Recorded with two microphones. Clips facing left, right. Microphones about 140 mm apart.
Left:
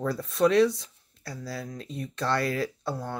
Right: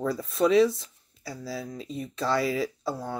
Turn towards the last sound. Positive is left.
turn(degrees=0)  # may be behind; listen again after turning